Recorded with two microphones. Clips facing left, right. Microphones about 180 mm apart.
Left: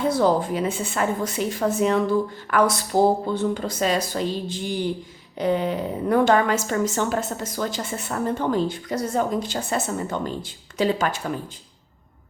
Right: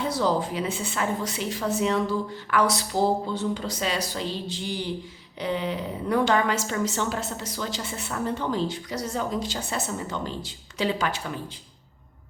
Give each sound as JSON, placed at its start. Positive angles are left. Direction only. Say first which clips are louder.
{"t": 0.0, "sound": "a woman's voice", "louder": "left 5 dB", "side_deg": 50}